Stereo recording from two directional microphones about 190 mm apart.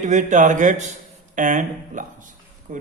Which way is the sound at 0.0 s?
40° right (ahead or behind).